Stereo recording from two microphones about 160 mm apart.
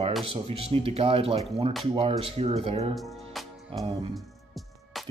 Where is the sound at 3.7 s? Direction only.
35° right (ahead or behind).